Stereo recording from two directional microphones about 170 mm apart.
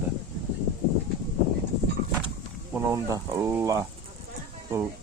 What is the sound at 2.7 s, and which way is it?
Speech, 15° right (ahead or behind).